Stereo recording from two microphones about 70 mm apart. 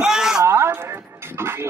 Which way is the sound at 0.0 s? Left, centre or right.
Centre.